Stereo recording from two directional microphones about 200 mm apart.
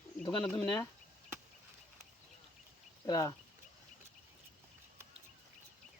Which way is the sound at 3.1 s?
15° left (ahead or behind).